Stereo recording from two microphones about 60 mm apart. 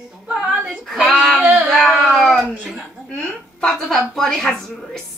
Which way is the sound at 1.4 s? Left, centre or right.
Right.